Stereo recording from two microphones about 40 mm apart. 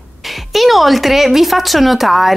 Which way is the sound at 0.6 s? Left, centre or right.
Centre.